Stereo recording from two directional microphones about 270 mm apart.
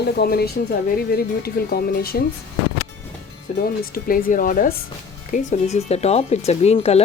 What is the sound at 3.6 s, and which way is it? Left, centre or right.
Speech, left.